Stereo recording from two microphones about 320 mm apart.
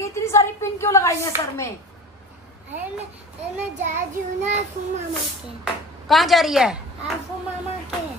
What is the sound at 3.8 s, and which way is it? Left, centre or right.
Child singing, right.